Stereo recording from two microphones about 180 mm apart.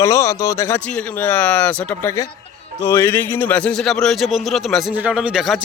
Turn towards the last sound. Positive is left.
turn(degrees=-5)  # may be behind; listen again after turning